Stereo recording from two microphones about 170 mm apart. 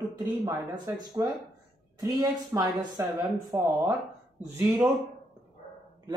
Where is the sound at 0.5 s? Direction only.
20° right (ahead or behind).